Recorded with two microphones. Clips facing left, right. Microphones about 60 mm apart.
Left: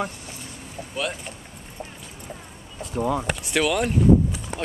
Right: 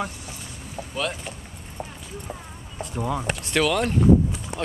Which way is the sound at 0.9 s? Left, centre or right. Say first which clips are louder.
Even; centre.